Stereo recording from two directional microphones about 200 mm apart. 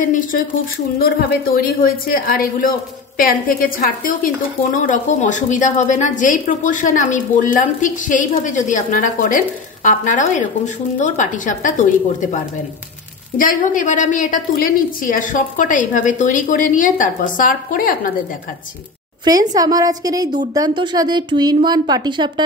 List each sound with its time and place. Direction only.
0.0 s a woman's voice: 40° left (ahead or behind)
13.4 s a woman's voice: 40° left (ahead or behind)
19.2 s a woman's voice: 20° right (ahead or behind)